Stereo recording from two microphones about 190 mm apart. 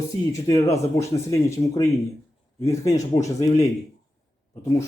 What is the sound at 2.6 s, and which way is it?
Speech, 15° left (ahead or behind).